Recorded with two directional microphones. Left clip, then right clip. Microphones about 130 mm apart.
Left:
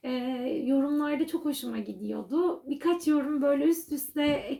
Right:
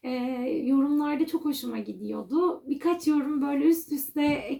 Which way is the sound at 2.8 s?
25° right (ahead or behind).